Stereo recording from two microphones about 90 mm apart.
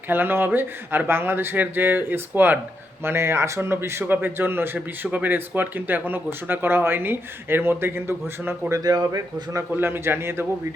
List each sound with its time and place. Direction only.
0.1 s a man's voice: 25° right (ahead or behind)
8.7 s a man's voice: 45° right (ahead or behind)
9.7 s a man's voice: 25° right (ahead or behind)